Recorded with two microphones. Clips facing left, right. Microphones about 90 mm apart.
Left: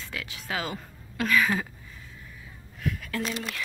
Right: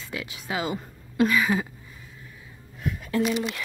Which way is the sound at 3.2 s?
10° right (ahead or behind).